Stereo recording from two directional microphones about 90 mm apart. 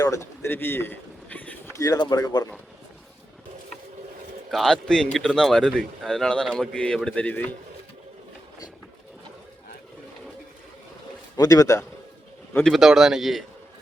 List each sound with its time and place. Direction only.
0.0 s a sound: 35° left (ahead or behind); by 1.7 s 20° left (ahead or behind)
1.7 s a man's voice: 40° left (ahead or behind)
4.5 s speech: 5° left (ahead or behind)
11.3 s a man's voice: 45° left (ahead or behind)
12.6 s a man's voice: centre (ahead or behind)